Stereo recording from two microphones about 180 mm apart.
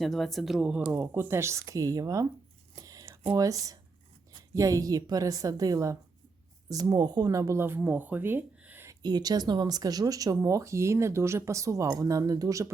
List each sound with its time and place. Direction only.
0.0 s speech: centre (ahead or behind); by 2.2 s 20° right (ahead or behind)
2.7 s a sound: 20° right (ahead or behind)
3.3 s speech: 20° right (ahead or behind)